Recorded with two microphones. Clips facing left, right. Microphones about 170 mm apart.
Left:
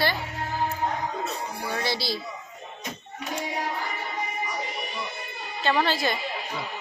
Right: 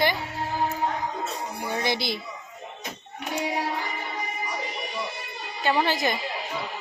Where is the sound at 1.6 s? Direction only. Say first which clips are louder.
Right 3 dB; 20° right (ahead or behind).